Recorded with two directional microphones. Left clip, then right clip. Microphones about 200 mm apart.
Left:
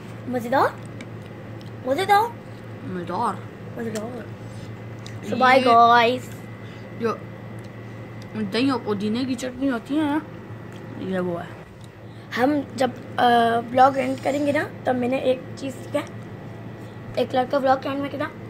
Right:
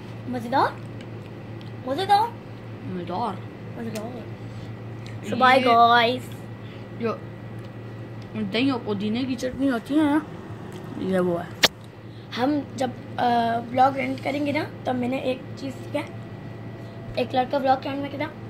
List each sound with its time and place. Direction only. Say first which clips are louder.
0.3 s a woman's voice: left 2 dB; 50° left (ahead or behind)
1.9 s a woman's voice: left 2 dB; 50° left (ahead or behind)
3.1 s speech: left 3 dB; 20° left (ahead or behind)
5.2 s a woman's voice: left 1 dB; 20° left (ahead or behind)
8.4 s a woman's voice: left 1 dB; 15° left (ahead or behind)
9.6 s speech: right 2 dB; 10° right (ahead or behind)
12.3 s a woman's voice: left 3 dB; 40° left (ahead or behind)
17.1 s a woman's voice: left 2 dB; 30° left (ahead or behind)